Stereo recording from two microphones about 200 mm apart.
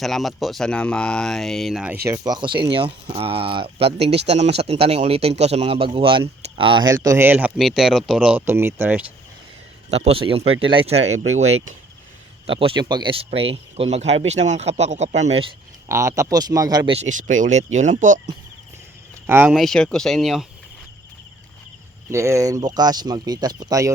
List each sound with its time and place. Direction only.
0.0 s speech: centre (ahead or behind)
2.0 s speech: 15° right (ahead or behind)
9.9 s speech: 30° right (ahead or behind)
15.9 s speech: 15° right (ahead or behind); by 18.2 s 40° right (ahead or behind)
19.3 s speech: 5° right (ahead or behind)
22.1 s speech: 15° right (ahead or behind)